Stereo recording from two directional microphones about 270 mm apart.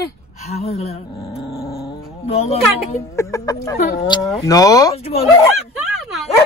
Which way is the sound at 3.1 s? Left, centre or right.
Centre.